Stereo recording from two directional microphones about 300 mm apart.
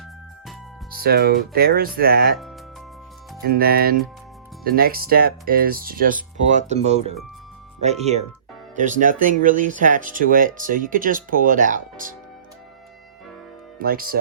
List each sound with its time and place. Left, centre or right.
0.9 s speech: right
3.4 s speech: right
13.7 s speech: right